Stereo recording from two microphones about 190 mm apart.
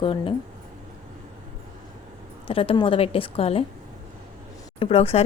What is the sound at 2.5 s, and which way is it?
A woman's voice, 30° left (ahead or behind).